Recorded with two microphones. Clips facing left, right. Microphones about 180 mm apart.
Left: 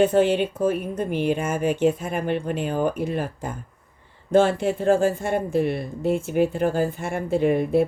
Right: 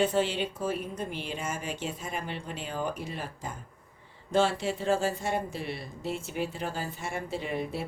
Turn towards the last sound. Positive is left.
turn(degrees=55)  # may be behind; listen again after turning